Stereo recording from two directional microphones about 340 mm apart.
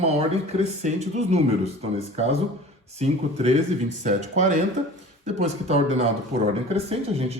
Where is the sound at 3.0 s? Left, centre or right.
Centre.